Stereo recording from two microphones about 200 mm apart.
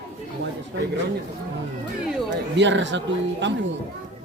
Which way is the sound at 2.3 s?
65° right (ahead or behind).